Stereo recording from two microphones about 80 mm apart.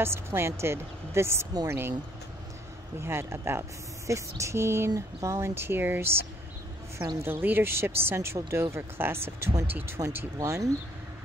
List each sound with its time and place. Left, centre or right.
0.0 s speech: right
3.0 s speech: right
7.2 s speech: right
10.1 s speech: right